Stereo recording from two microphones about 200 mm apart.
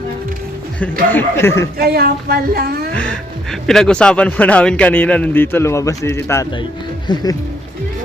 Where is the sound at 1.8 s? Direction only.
50° right (ahead or behind).